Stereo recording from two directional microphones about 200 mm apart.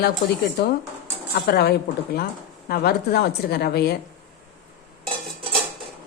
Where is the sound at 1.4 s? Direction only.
50° left (ahead or behind).